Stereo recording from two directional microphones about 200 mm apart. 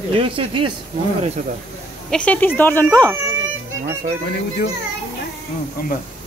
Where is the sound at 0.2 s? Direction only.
25° right (ahead or behind).